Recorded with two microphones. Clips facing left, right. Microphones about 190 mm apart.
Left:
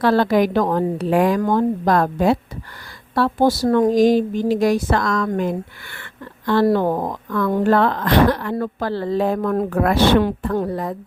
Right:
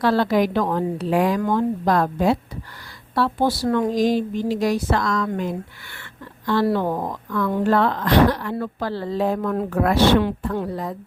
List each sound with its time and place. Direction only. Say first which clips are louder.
0.0 s speech: left 3 dB; 55° left (ahead or behind)